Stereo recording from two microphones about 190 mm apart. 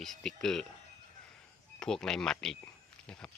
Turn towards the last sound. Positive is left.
turn(degrees=5)  # may be behind; listen again after turning